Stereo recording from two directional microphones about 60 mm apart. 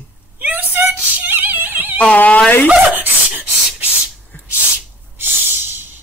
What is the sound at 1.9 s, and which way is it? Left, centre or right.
Speech, left.